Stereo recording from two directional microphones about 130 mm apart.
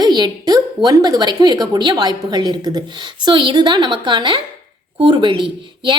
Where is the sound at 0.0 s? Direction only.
35° right (ahead or behind).